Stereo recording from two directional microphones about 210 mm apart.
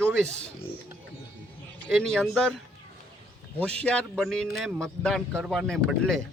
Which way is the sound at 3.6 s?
5° left (ahead or behind).